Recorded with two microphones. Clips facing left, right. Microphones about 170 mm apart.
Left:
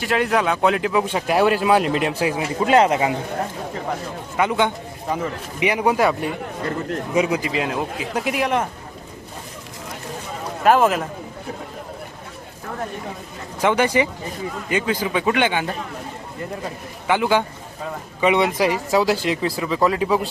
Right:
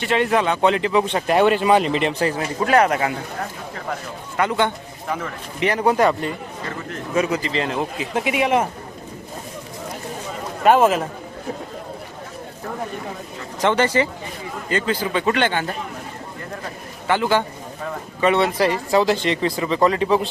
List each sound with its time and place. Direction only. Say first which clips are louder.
0.0 s speech: right 1 dB; centre (ahead or behind)
2.6 s speech: left 1 dB; 20° left (ahead or behind)
4.4 s a man's voice: even; 15° left (ahead or behind); by 8.6 s centre (ahead or behind)
10.6 s a man's voice: right 1 dB; centre (ahead or behind)
13.6 s a man's voice: even; 10° left (ahead or behind)
17.1 s a man's voice: even; 15° left (ahead or behind)